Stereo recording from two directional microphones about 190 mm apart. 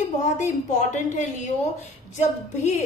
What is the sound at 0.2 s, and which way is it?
A woman's voice, 40° left (ahead or behind).